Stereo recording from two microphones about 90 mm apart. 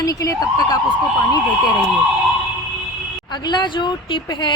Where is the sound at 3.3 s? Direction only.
55° left (ahead or behind).